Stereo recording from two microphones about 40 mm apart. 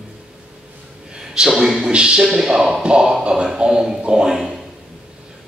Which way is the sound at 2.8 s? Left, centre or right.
Centre.